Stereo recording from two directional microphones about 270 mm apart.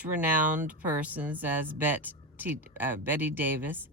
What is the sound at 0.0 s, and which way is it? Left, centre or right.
Speech, centre.